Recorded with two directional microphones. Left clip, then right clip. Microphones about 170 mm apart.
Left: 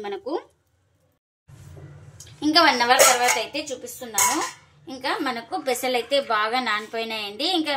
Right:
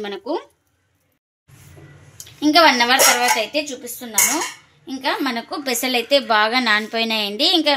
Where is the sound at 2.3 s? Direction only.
55° right (ahead or behind).